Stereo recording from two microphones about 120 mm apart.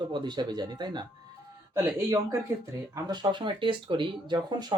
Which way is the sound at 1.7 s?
25° right (ahead or behind).